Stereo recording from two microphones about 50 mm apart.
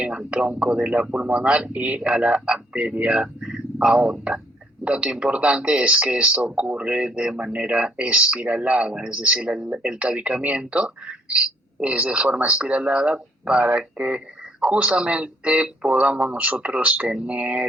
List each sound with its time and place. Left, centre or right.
0.3 s speech: right